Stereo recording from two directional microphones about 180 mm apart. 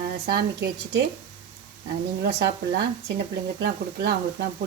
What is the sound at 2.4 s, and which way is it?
Speech, 70° right (ahead or behind).